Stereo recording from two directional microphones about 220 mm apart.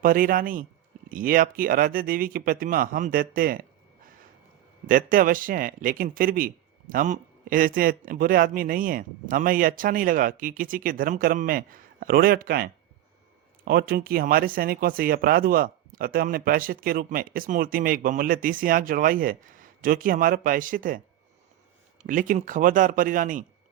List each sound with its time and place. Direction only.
0.0 s a man's voice: 40° right (ahead or behind)
4.9 s a man's voice: 40° right (ahead or behind)
22.0 s a man's voice: 35° right (ahead or behind)